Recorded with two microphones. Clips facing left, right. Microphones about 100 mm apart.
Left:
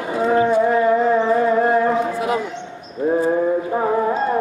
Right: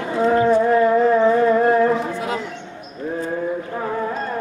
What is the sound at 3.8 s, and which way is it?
Music, 25° left (ahead or behind).